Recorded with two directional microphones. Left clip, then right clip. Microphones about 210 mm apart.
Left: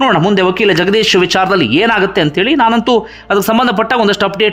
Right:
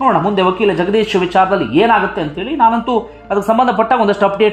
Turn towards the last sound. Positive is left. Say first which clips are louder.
# left 1 dB
turn(degrees=15)  # may be behind; listen again after turning